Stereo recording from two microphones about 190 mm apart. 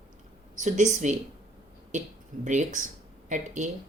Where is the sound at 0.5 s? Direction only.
40° right (ahead or behind).